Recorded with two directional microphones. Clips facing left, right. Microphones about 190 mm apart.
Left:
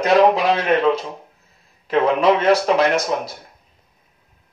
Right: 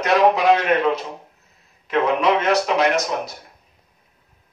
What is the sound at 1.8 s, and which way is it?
Speech, 30° left (ahead or behind).